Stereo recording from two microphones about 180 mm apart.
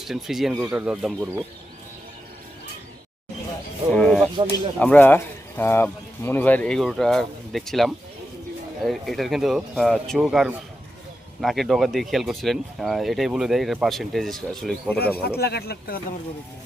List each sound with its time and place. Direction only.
0.0 s speech: centre (ahead or behind)
3.9 s a sound: 5° left (ahead or behind)
4.8 s speech: 10° left (ahead or behind)
15.2 s speech: 60° left (ahead or behind)